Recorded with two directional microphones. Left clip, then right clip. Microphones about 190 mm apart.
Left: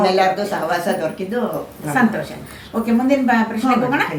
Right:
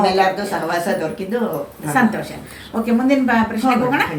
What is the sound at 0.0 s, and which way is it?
Speech, 15° left (ahead or behind).